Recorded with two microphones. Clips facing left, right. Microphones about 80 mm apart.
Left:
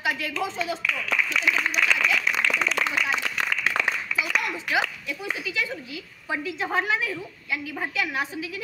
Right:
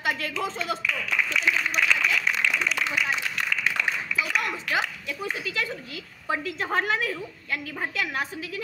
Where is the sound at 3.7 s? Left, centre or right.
Left.